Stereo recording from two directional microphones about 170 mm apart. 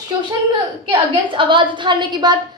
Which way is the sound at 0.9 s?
30° right (ahead or behind).